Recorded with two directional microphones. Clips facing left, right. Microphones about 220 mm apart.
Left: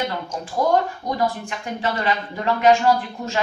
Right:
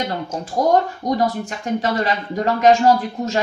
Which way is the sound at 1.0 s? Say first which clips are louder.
Right 4 dB; 40° right (ahead or behind).